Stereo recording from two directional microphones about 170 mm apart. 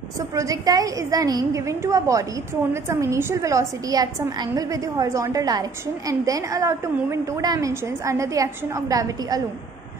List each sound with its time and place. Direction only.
0.3 s a woman's voice: 20° right (ahead or behind)